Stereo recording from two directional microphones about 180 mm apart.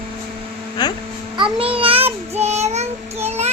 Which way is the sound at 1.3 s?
30° right (ahead or behind).